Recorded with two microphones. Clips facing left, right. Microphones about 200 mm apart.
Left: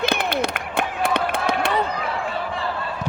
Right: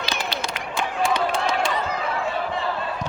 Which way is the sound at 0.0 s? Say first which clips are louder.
Left 6 dB; 55° left (ahead or behind).